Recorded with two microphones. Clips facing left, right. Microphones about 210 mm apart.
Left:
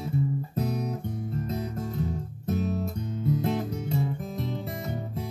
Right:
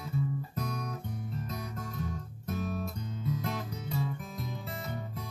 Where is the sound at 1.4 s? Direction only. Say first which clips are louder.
Left 8 dB; 25° left (ahead or behind).